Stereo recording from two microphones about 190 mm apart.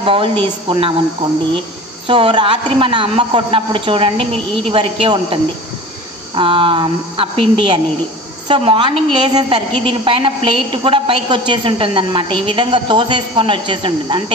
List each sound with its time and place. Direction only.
0.0 s a woman's voice: 30° right (ahead or behind)
2.0 s a woman's voice: 30° right (ahead or behind)